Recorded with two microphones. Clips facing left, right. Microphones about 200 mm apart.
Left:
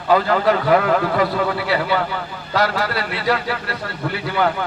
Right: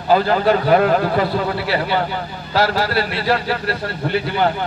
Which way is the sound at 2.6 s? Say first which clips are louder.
Right 3 dB; 30° right (ahead or behind).